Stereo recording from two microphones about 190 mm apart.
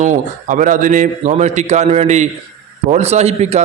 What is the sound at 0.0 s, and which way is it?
A man's voice, 40° right (ahead or behind).